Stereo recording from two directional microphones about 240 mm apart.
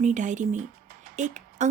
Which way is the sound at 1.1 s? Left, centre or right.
Right.